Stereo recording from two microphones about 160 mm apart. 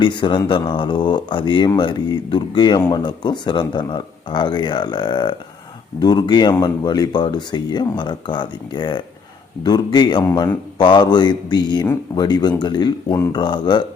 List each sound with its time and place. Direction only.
0.0 s speech: 30° left (ahead or behind)